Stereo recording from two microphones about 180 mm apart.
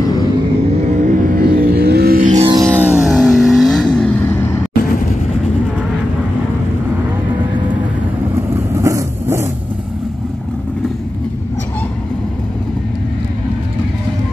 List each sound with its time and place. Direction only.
0.8 s music: 45° right (ahead or behind)
2.4 s music: 25° right (ahead or behind)
2.9 s vehicle: centre (ahead or behind)
8.8 s vehicle: 15° right (ahead or behind)